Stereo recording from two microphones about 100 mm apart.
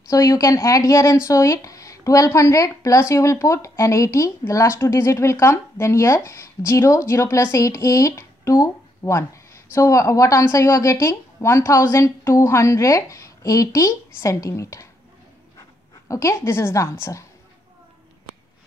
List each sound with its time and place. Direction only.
0.1 s speech: 30° left (ahead or behind)
16.1 s a woman's voice: 30° left (ahead or behind)